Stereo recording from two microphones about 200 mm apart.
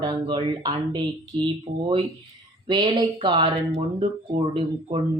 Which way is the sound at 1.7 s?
40° right (ahead or behind).